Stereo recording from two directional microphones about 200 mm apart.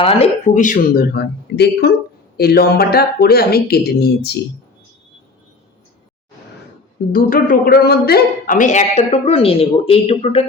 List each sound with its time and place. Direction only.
0.0 s speech: 30° left (ahead or behind); by 4.4 s 55° left (ahead or behind)
7.1 s speech: 45° left (ahead or behind); by 10.4 s 30° left (ahead or behind)